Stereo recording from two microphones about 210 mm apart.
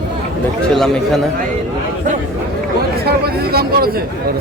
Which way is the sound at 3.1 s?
50° right (ahead or behind).